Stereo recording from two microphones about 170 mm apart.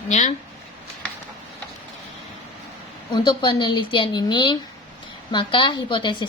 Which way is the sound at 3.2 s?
25° left (ahead or behind).